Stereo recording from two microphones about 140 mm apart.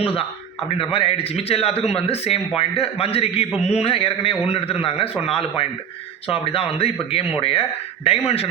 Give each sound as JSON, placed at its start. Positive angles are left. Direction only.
{"t": 0.7, "sound": "a man's voice", "side_deg": 45}